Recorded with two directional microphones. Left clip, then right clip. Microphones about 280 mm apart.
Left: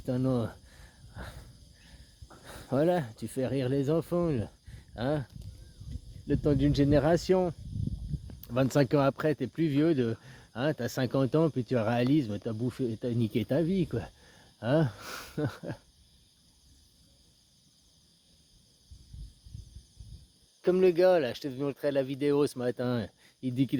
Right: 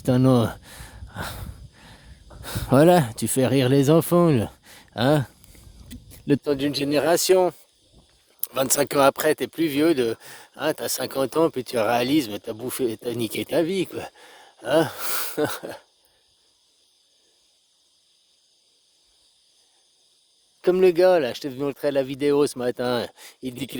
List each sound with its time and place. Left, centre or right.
0.0 s speech: right
20.6 s speech: right